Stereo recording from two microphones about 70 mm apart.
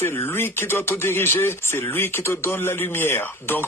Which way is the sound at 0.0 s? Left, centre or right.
Left.